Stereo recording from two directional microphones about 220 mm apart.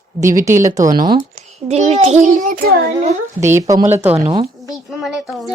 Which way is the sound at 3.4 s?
15° right (ahead or behind).